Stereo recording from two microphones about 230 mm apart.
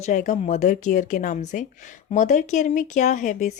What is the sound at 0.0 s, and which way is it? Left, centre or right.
Speech, left.